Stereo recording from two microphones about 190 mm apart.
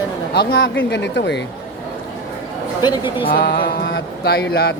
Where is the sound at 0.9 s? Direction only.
65° left (ahead or behind).